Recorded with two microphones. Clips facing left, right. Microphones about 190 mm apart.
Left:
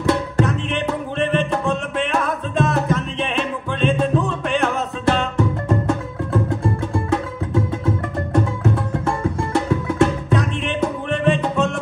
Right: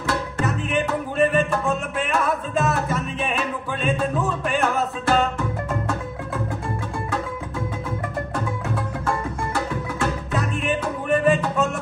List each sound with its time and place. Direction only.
0.4 s music: 5° right (ahead or behind)
9.0 s music: 25° left (ahead or behind)
10.3 s music: 5° right (ahead or behind)